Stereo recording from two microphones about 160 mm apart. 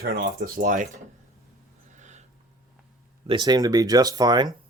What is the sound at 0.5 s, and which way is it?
Speech, 55° right (ahead or behind).